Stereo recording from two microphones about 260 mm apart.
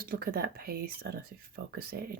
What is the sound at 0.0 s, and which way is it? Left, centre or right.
Speech, right.